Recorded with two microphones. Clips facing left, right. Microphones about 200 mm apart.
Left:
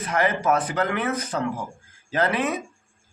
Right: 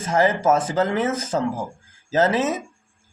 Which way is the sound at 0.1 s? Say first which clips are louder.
Right 4 dB; 25° right (ahead or behind).